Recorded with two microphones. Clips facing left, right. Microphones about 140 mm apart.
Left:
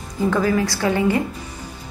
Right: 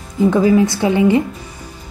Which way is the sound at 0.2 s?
20° right (ahead or behind).